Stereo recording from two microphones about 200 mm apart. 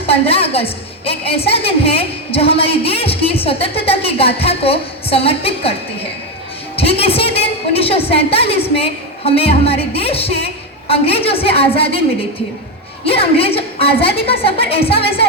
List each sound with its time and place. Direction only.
0.1 s a woman's voice: 30° left (ahead or behind)
6.7 s a woman's voice: 30° left (ahead or behind)
13.1 s a woman's voice: 30° left (ahead or behind)